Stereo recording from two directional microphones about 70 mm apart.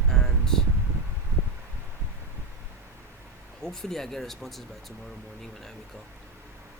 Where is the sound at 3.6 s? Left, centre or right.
Centre.